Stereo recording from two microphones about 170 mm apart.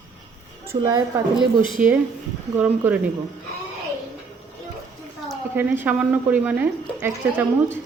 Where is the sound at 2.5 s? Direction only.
10° right (ahead or behind).